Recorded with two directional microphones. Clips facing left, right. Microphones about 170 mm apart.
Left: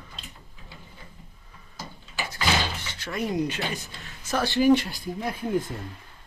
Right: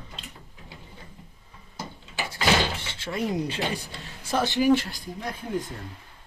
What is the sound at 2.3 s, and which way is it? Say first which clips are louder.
Door: right 3 dB; 25° right (ahead or behind).